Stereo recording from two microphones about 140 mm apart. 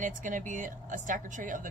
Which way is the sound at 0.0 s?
65° right (ahead or behind).